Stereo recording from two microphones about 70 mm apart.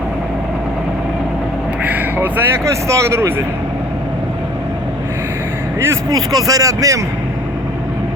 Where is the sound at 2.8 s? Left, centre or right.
Right.